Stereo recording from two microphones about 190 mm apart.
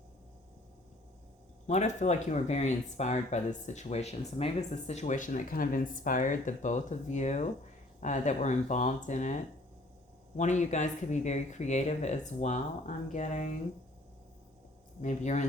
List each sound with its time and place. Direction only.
1.6 s speech: 40° left (ahead or behind)
15.0 s speech: 40° left (ahead or behind)